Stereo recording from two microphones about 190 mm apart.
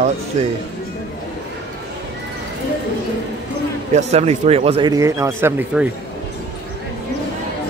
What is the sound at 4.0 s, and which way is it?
Speech, 35° right (ahead or behind).